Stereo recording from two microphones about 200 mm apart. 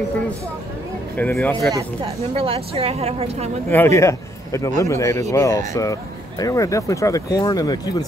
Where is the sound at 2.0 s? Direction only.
30° right (ahead or behind).